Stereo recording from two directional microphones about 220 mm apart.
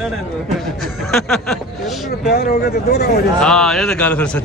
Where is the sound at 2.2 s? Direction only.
45° left (ahead or behind).